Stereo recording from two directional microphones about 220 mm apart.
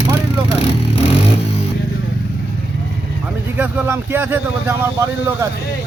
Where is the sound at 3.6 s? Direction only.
10° right (ahead or behind).